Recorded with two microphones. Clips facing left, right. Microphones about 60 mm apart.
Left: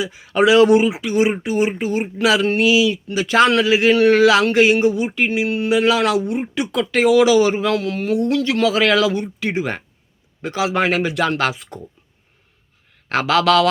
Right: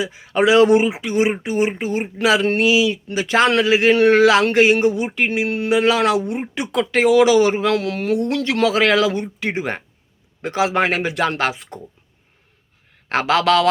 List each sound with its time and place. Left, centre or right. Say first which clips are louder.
0.0 s speech: left 1 dB; right
5.1 s a sound: left 1 dB; right
5.7 s speech: even; right
13.1 s speech: left 1 dB; right